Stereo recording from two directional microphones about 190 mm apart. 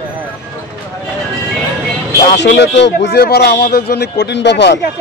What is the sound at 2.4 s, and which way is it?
Speech, 65° left (ahead or behind).